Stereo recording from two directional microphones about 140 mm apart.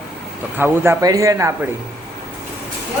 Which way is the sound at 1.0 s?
25° right (ahead or behind).